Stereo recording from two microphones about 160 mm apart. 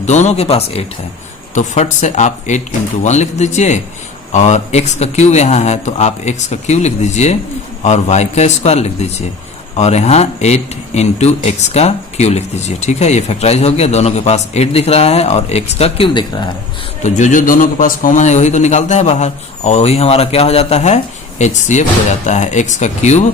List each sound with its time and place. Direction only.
0.0 s speech: 45° left (ahead or behind); by 16.5 s 30° left (ahead or behind)
17.0 s speech: 50° left (ahead or behind)